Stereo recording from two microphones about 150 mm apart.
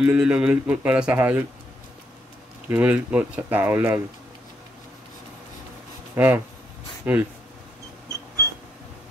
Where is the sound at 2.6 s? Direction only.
10° right (ahead or behind).